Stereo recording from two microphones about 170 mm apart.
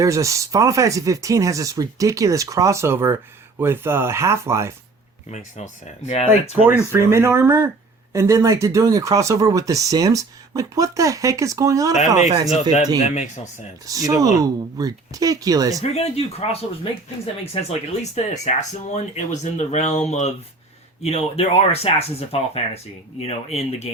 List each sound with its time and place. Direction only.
0.0 s speech: 20° right (ahead or behind)
5.3 s speech: 45° left (ahead or behind)
6.6 s speech: 15° right (ahead or behind)
13.0 s speech: 45° left (ahead or behind)
13.8 s speech: 20° right (ahead or behind)
15.8 s speech: 40° left (ahead or behind)